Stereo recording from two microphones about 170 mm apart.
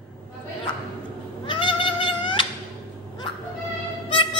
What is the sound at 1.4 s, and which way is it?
Cat, 30° left (ahead or behind).